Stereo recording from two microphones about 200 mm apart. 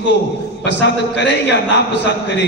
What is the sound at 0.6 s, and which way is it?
A man's voice, 60° left (ahead or behind).